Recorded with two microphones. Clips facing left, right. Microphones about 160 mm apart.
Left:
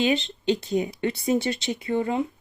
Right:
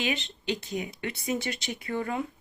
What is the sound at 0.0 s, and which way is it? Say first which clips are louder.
Speech: left 8 dB; 30° left (ahead or behind).